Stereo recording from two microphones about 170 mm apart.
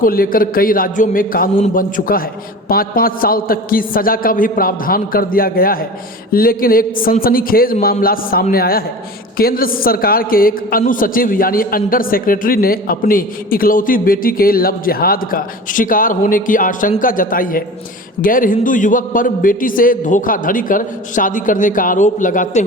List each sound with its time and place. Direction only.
0.0 s a man's voice: 60° left (ahead or behind)